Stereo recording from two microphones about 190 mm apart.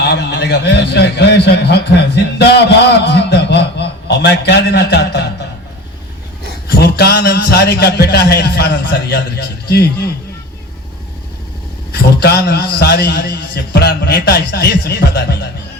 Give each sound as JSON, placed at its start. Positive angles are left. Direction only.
{"t": 0.0, "sound": "a man's voice", "side_deg": 65}
{"t": 6.7, "sound": "a man's voice", "side_deg": 55}
{"t": 11.9, "sound": "a man's voice", "side_deg": 55}